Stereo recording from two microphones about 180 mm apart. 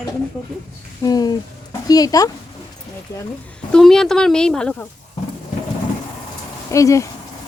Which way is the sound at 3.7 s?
Centre (ahead or behind).